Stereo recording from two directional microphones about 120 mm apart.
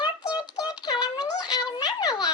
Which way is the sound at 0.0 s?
35° left (ahead or behind).